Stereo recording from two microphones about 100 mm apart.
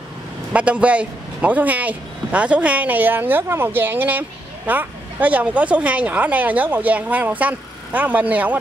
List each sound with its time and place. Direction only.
0.5 s speech: 10° right (ahead or behind)